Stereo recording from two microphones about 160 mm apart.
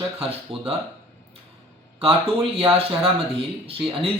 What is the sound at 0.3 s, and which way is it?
Speech, 5° right (ahead or behind).